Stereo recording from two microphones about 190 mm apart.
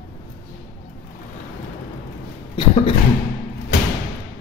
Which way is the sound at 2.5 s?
30° left (ahead or behind).